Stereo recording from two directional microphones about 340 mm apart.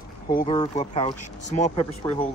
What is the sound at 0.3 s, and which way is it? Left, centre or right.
Speech, centre.